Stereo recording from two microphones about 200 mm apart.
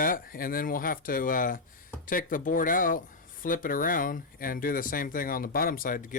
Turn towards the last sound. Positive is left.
turn(degrees=45)  # may be behind; listen again after turning